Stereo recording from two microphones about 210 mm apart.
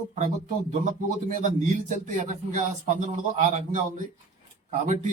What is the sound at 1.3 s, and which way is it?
Speech, 35° right (ahead or behind).